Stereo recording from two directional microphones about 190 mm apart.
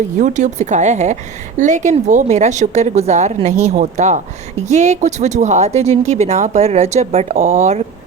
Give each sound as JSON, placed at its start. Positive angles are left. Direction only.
{"t": 0.2, "sound": "a woman's voice", "side_deg": -40}